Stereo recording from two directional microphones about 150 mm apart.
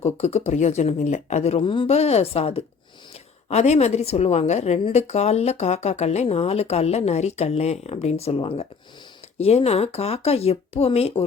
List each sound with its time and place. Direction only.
0.0 s a woman's voice: 45° left (ahead or behind)